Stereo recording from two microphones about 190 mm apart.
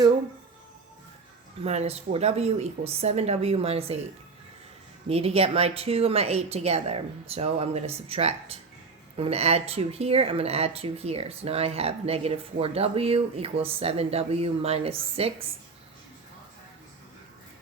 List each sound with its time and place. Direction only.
1.6 s speech: 35° right (ahead or behind)
5.0 s speech: 30° right (ahead or behind)